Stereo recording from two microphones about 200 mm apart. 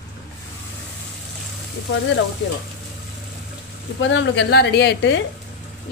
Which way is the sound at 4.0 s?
65° left (ahead or behind).